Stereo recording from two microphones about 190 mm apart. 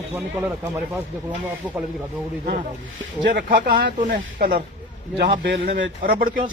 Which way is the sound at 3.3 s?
55° right (ahead or behind).